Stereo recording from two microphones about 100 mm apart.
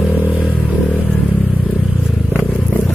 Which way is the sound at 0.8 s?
15° left (ahead or behind).